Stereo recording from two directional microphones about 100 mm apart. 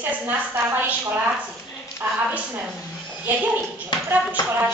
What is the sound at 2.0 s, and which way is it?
Speech, 20° right (ahead or behind).